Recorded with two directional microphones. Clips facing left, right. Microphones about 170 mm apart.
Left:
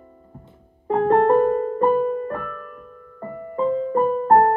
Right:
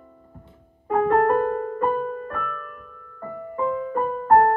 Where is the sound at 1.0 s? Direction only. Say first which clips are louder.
Left 5 dB; 20° left (ahead or behind).